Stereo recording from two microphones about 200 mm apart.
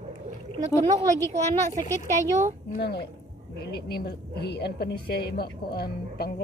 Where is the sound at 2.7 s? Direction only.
55° left (ahead or behind).